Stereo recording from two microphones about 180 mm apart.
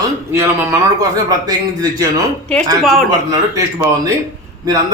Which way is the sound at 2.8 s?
Centre (ahead or behind).